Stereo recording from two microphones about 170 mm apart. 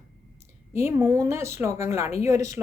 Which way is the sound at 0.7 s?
15° right (ahead or behind).